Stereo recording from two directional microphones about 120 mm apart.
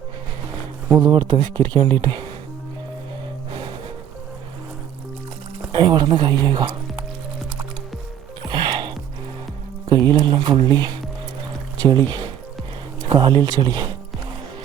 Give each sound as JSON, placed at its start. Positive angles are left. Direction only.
{"t": 0.9, "sound": "speech", "side_deg": -35}
{"t": 5.7, "sound": "speech", "side_deg": -40}
{"t": 8.4, "sound": "music", "side_deg": -40}
{"t": 9.9, "sound": "speech", "side_deg": -35}